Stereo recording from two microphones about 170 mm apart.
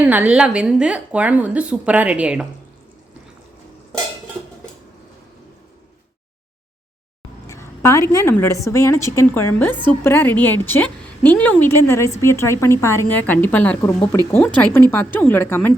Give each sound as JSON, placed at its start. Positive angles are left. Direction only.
{"t": 0.0, "sound": "a woman's voice", "side_deg": -10}
{"t": 7.4, "sound": "a woman's voice", "side_deg": 15}